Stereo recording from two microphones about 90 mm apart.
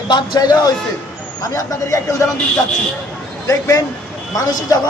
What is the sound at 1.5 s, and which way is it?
Speech, 35° left (ahead or behind).